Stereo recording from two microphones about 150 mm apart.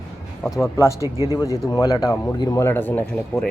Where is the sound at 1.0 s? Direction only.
20° right (ahead or behind).